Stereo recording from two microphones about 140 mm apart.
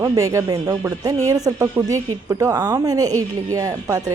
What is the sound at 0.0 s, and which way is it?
A woman's voice, 25° right (ahead or behind).